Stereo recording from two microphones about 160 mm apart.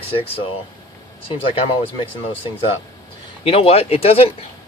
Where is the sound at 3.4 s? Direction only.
35° left (ahead or behind).